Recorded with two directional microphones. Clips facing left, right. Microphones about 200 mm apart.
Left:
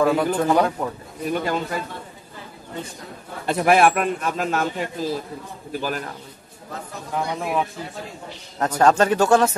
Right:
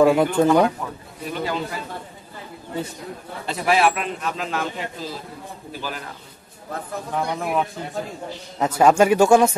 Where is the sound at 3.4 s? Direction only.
55° left (ahead or behind).